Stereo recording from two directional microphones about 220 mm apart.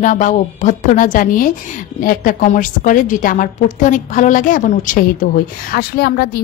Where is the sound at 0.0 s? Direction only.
35° left (ahead or behind).